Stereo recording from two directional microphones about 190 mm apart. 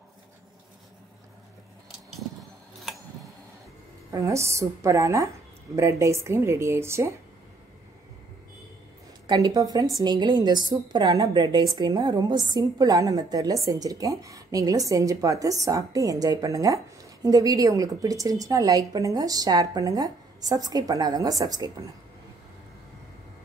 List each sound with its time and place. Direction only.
1.9 s vehicle: centre (ahead or behind)
4.1 s speech: 15° right (ahead or behind)
9.3 s a woman's voice: 20° right (ahead or behind)